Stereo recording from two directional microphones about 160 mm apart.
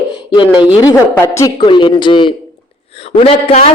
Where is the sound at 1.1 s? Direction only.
20° left (ahead or behind).